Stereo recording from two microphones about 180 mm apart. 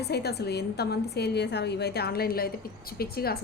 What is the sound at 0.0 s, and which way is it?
A woman's voice, 65° left (ahead or behind).